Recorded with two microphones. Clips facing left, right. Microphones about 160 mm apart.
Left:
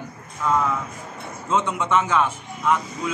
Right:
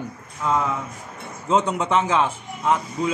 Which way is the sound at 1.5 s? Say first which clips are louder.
Right 1 dB; 35° right (ahead or behind).